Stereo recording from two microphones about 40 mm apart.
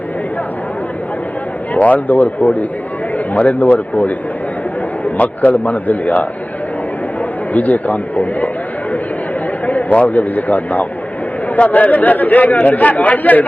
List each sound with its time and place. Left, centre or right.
1.7 s a man's voice: left
7.5 s a man's voice: left
9.6 s a man's voice: left